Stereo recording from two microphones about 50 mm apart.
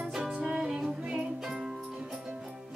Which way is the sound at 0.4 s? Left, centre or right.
Centre.